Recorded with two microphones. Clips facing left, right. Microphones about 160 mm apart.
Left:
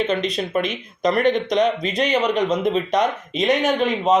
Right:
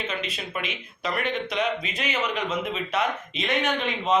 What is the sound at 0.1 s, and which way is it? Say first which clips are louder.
Speech: left 10 dB; 35° left (ahead or behind).